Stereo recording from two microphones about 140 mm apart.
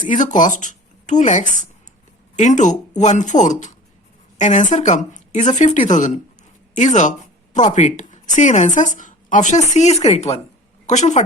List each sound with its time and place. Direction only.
0.0 s a woman's voice: 65° left (ahead or behind)
9.7 s speech: 50° left (ahead or behind)